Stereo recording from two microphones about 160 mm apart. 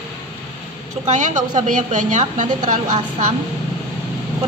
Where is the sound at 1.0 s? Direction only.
50° right (ahead or behind).